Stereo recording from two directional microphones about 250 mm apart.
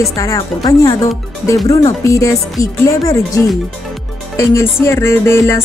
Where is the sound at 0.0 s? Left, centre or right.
Centre.